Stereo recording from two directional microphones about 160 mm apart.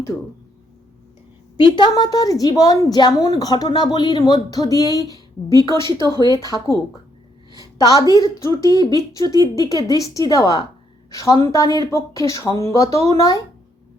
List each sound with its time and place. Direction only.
1.5 s a woman's voice: 30° left (ahead or behind)
6.1 s speech: 25° right (ahead or behind)
7.5 s a woman's voice: 25° left (ahead or behind)